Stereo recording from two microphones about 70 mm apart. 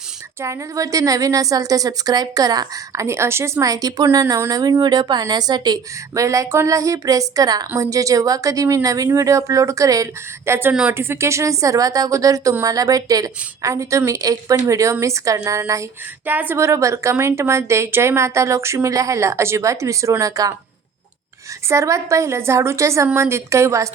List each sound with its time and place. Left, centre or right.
0.4 s a woman's voice: right
3.0 s speech: right
3.7 s a woman's voice: right
6.1 s a woman's voice: right
16.2 s speech: right
16.6 s speech: right
21.7 s speech: right